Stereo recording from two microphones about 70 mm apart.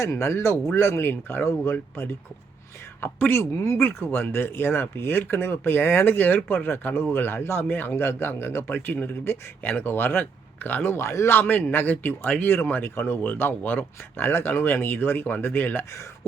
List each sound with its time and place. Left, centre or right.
0.0 s speech: left
3.5 s speech: left
3.8 s speech: left
11.3 s speech: left